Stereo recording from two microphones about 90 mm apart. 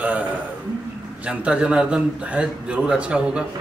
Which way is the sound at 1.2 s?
15° right (ahead or behind).